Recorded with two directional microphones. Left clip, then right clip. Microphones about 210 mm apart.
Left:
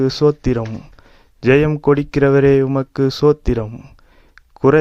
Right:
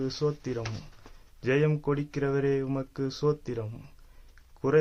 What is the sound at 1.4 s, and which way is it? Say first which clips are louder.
A man's voice: left 13 dB; 40° left (ahead or behind).